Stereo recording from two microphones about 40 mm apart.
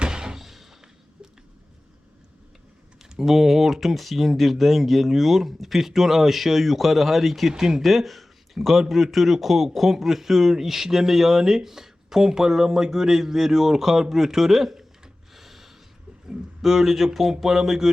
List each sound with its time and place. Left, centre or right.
0.0 s slam: centre
0.4 s a sound: centre
3.0 s speech: centre